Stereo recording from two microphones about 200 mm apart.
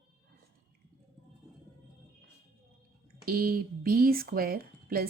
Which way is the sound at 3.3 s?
50° right (ahead or behind).